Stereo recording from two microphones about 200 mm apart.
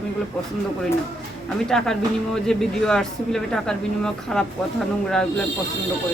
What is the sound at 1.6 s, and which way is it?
Speech, 5° left (ahead or behind).